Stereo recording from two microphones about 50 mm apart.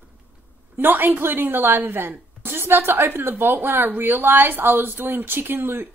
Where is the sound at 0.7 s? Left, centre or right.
Right.